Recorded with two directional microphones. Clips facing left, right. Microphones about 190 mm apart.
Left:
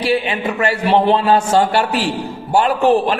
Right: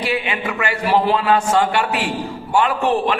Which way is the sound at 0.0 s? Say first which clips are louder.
Left 4 dB; 30° left (ahead or behind).